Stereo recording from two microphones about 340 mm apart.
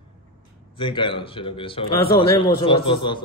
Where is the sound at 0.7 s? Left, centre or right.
Centre.